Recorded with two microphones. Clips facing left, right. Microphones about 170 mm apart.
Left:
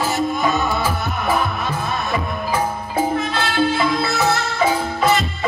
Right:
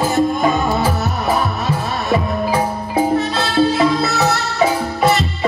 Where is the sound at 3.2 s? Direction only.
35° right (ahead or behind).